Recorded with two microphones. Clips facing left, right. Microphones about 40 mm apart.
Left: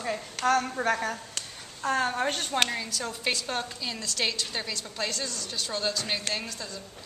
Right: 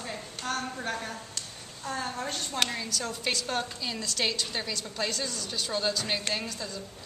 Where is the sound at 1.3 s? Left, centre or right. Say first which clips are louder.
Left 2 dB; left.